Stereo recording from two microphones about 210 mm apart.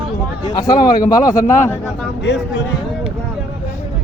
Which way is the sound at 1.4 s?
35° left (ahead or behind).